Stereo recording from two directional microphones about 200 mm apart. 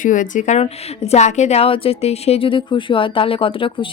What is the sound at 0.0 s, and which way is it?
A woman's voice, 40° left (ahead or behind).